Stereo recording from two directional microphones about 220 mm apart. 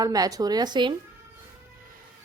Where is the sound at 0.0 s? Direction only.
15° right (ahead or behind).